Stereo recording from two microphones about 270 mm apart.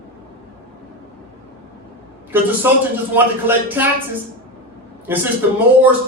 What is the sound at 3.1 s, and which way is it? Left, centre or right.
Speech, centre.